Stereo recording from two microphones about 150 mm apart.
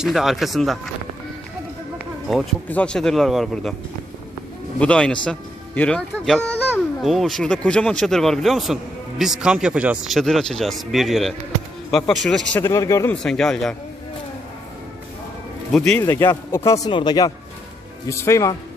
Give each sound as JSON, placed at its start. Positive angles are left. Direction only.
{"t": 0.0, "sound": "speech", "side_deg": 0}
{"t": 2.3, "sound": "speech", "side_deg": 0}
{"t": 4.8, "sound": "a man's voice", "side_deg": 5}
{"t": 12.5, "sound": "a man's voice", "side_deg": 15}
{"t": 13.1, "sound": "speech", "side_deg": 5}
{"t": 16.0, "sound": "a man's voice", "side_deg": 15}